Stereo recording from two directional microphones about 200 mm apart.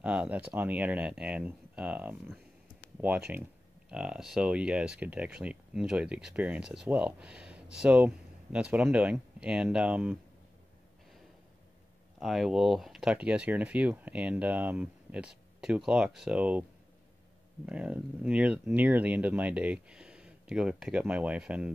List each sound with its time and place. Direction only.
0.0 s speech: 5° right (ahead or behind)
12.2 s speech: centre (ahead or behind)
17.6 s speech: 5° right (ahead or behind)